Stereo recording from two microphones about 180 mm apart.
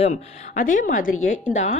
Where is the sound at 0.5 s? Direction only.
50° left (ahead or behind).